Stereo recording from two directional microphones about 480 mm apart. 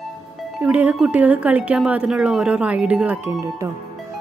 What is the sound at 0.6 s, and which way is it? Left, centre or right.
Speech, centre.